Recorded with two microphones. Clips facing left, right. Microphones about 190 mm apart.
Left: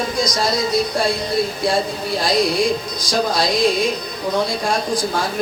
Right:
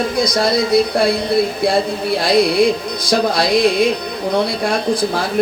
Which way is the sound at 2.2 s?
60° right (ahead or behind).